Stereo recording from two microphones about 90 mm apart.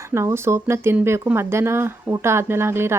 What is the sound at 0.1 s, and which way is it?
Speech, 30° right (ahead or behind).